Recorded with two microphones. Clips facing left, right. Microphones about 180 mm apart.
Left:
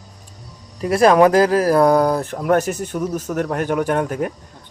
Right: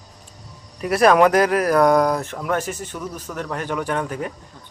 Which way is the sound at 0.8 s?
25° left (ahead or behind).